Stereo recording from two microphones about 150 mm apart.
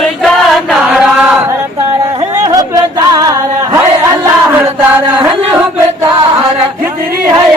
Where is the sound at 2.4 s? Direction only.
25° right (ahead or behind).